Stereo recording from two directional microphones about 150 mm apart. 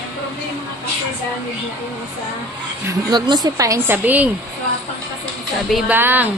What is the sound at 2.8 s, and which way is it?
A woman's voice, 30° right (ahead or behind).